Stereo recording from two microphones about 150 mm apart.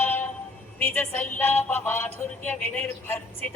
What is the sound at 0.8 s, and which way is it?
Music, 15° left (ahead or behind).